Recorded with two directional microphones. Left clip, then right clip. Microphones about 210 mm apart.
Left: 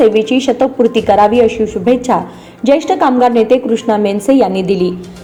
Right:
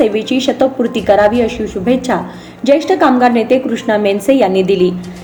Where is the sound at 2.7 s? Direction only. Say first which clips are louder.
Even; 25° left (ahead or behind).